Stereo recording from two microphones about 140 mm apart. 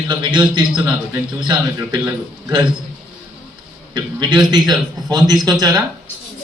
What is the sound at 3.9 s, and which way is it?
A man's voice, 30° right (ahead or behind).